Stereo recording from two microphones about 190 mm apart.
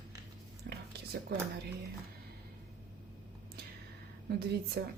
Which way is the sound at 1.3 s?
55° right (ahead or behind).